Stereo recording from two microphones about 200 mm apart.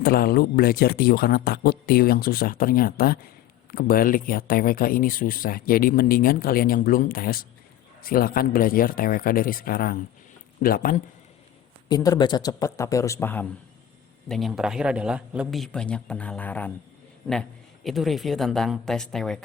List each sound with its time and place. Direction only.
0.0 s speech: 50° left (ahead or behind)
11.9 s a man's voice: 20° left (ahead or behind); by 19.4 s centre (ahead or behind)